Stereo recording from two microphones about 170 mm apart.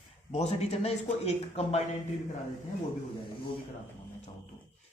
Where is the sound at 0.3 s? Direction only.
40° left (ahead or behind).